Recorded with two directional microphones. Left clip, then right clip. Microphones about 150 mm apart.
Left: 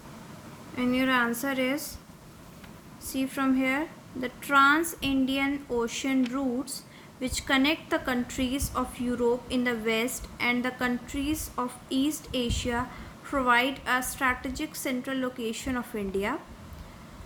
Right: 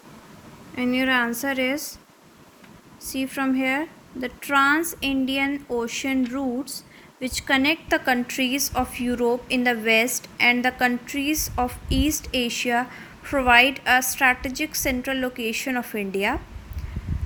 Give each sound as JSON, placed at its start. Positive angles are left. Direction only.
{"t": 0.8, "sound": "a woman's voice", "side_deg": -30}
{"t": 3.1, "sound": "a woman's voice", "side_deg": -25}